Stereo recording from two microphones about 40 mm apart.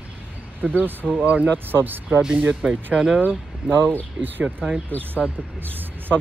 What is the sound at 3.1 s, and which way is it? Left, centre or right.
Speech, right.